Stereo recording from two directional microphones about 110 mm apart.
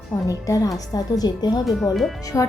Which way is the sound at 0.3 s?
30° left (ahead or behind).